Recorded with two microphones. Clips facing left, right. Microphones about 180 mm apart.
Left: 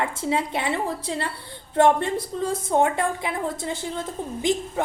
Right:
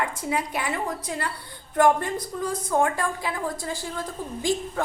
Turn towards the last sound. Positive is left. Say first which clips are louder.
# left 2 dB
turn(degrees=20)  # may be behind; listen again after turning